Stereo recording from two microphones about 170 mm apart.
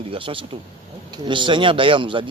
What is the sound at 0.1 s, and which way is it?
A man's voice, 30° right (ahead or behind).